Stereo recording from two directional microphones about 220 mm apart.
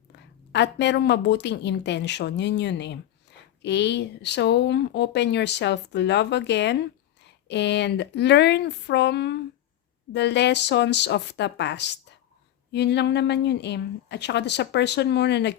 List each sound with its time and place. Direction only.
0.5 s speech: 50° left (ahead or behind)